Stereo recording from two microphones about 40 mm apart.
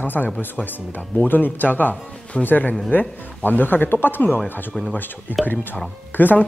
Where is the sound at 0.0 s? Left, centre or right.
Left.